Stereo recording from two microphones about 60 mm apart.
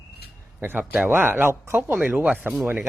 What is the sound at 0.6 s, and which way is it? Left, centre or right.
Speech, right.